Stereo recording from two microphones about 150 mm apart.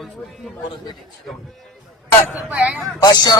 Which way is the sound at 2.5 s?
10° right (ahead or behind).